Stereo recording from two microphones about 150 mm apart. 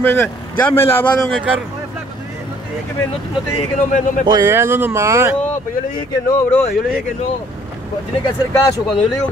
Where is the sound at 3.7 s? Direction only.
60° left (ahead or behind).